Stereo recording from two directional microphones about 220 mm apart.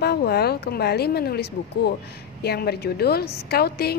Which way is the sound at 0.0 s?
45° left (ahead or behind).